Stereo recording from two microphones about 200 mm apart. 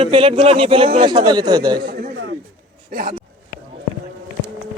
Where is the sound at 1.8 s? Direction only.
45° right (ahead or behind).